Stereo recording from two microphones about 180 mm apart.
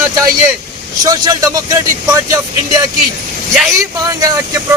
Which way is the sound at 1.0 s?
20° right (ahead or behind).